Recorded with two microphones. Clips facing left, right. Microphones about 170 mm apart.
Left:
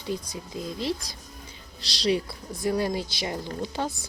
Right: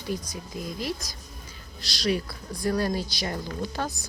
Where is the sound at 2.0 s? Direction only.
25° left (ahead or behind).